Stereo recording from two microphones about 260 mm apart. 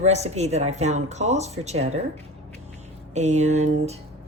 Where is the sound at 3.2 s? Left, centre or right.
Right.